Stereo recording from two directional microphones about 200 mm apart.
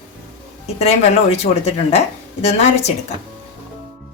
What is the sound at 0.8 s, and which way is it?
Speech, 30° left (ahead or behind).